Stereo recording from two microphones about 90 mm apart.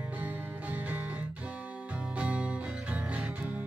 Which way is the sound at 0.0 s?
20° right (ahead or behind).